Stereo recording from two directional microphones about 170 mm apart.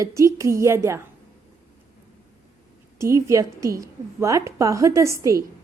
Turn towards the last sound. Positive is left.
turn(degrees=-20)  # may be behind; listen again after turning